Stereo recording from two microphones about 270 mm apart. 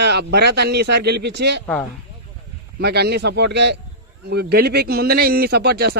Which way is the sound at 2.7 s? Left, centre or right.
Right.